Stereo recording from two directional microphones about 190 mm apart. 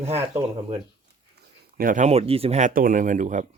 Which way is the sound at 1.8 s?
40° right (ahead or behind).